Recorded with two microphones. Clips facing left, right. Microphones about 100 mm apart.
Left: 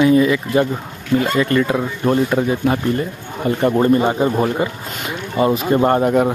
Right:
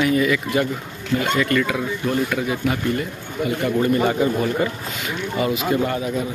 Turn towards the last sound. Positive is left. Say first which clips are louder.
# left 9 dB
turn(degrees=60)  # may be behind; listen again after turning